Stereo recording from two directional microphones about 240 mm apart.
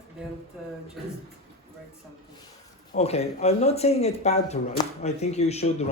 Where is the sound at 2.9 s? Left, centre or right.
Left.